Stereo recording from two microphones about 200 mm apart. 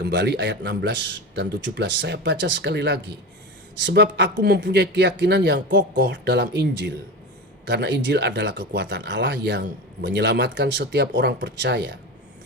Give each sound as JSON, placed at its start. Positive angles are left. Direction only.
{"t": 0.0, "sound": "speech", "side_deg": -60}